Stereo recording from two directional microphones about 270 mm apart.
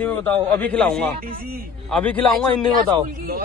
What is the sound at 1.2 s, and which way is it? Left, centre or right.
Speech, right.